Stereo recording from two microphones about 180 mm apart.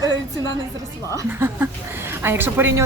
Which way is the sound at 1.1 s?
10° right (ahead or behind).